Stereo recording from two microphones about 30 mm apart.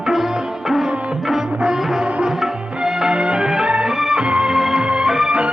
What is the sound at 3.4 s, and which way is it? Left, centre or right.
Music, centre.